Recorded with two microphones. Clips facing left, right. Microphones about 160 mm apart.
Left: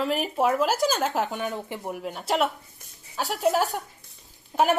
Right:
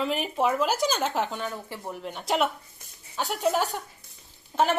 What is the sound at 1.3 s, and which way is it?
A woman's voice, 20° left (ahead or behind).